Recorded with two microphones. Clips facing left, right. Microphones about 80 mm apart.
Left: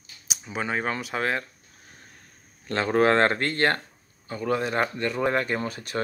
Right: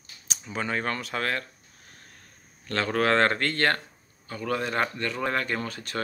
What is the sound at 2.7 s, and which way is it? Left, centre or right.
Speech, left.